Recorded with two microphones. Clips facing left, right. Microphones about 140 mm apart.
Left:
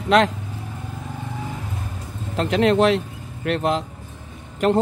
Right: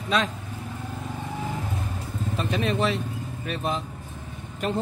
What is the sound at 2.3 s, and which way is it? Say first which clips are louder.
Speech: left 9 dB; 90° left.